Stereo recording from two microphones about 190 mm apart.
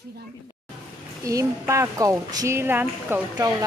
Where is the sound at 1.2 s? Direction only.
15° right (ahead or behind).